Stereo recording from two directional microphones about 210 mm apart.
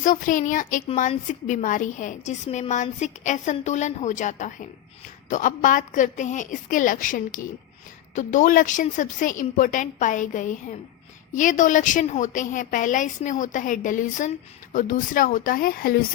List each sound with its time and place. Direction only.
0.0 s a child's voice: 40° left (ahead or behind)